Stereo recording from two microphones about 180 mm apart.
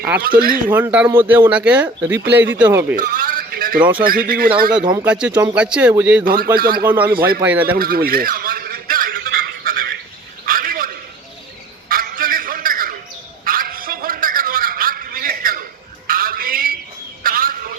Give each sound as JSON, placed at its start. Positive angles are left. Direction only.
{"t": 0.2, "sound": "speech", "side_deg": -55}
{"t": 0.7, "sound": "speech", "side_deg": -10}
{"t": 2.9, "sound": "a sound", "side_deg": -50}
{"t": 3.9, "sound": "speech", "side_deg": -55}
{"t": 5.0, "sound": "speech", "side_deg": -5}
{"t": 6.2, "sound": "speech", "side_deg": -55}
{"t": 6.8, "sound": "speech", "side_deg": -10}
{"t": 7.1, "sound": "speech", "side_deg": -55}
{"t": 7.4, "sound": "speech", "side_deg": -10}
{"t": 7.8, "sound": "a sound", "side_deg": -55}
{"t": 10.4, "sound": "a sound", "side_deg": -50}